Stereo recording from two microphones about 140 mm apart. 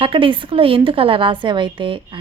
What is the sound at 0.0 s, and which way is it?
A woman's voice, 40° right (ahead or behind).